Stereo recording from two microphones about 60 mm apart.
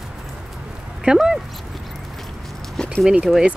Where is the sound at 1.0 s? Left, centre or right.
Centre.